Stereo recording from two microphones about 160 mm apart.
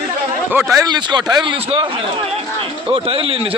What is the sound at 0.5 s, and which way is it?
A man's voice, 15° right (ahead or behind).